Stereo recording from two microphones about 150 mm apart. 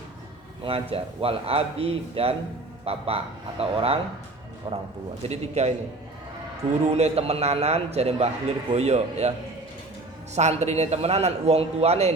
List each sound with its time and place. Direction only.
0.6 s speech: 40° right (ahead or behind)
5.3 s a man's voice: 45° right (ahead or behind)
6.8 s a man's voice: 45° right (ahead or behind)
10.3 s a man's voice: 50° right (ahead or behind)